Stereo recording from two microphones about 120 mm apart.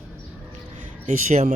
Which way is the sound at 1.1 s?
70° right (ahead or behind).